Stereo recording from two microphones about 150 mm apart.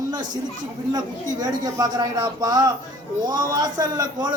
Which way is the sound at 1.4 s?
25° right (ahead or behind).